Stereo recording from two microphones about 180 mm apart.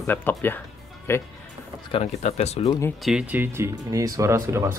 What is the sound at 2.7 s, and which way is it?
Speech, 15° left (ahead or behind).